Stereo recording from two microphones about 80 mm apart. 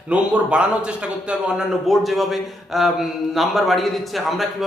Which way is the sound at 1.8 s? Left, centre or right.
Centre.